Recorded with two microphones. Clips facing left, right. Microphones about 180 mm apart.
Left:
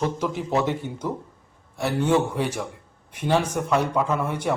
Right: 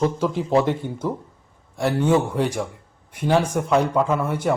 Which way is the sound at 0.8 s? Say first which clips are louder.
Right 3 dB; 50° right (ahead or behind).